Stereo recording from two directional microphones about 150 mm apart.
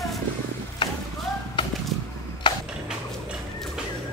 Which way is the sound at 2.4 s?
30° left (ahead or behind).